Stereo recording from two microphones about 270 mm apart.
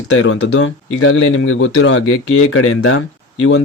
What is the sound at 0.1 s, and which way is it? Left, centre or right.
Speech, left.